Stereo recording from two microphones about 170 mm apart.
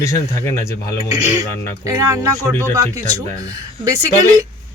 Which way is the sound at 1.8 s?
20° right (ahead or behind).